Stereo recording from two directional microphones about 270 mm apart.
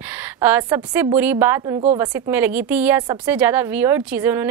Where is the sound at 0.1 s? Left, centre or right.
Centre.